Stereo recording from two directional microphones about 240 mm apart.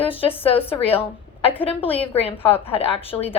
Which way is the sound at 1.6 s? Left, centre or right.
Left.